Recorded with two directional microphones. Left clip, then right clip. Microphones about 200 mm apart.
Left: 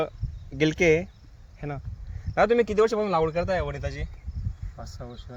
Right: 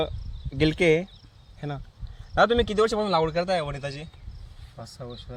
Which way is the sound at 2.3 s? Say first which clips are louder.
Even; 15° left (ahead or behind).